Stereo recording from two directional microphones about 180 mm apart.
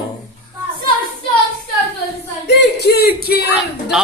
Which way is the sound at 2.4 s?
70° left (ahead or behind).